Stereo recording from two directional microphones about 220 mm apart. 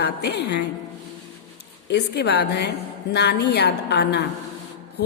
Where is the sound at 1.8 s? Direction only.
50° left (ahead or behind).